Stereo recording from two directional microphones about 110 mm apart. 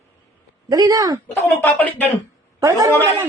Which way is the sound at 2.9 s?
25° right (ahead or behind).